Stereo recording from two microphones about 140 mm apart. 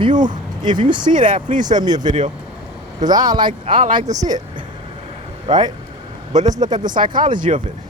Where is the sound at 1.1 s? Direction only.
65° right (ahead or behind).